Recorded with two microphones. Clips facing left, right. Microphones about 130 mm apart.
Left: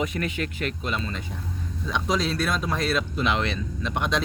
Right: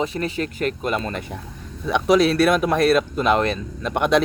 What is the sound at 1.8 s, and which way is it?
Speech, 65° right (ahead or behind).